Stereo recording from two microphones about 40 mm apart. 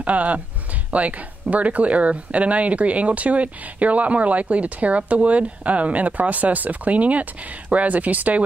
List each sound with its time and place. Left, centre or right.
0.0 s speech: right